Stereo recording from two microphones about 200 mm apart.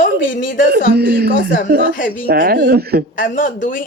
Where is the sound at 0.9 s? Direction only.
50° right (ahead or behind).